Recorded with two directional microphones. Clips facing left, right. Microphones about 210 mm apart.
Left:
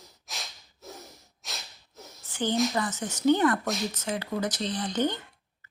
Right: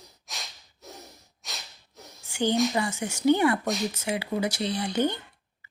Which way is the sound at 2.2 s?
10° right (ahead or behind).